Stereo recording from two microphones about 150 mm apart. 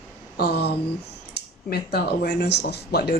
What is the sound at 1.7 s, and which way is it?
Speech, 90° left.